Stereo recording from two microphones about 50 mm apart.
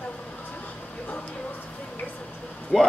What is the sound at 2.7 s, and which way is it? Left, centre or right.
Speech, centre.